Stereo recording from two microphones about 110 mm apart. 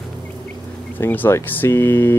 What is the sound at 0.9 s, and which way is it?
Speech, 15° left (ahead or behind).